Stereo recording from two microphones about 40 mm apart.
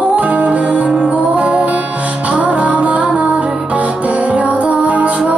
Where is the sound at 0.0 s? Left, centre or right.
Right.